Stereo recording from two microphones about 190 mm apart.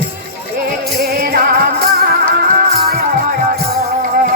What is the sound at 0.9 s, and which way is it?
Music, 55° right (ahead or behind).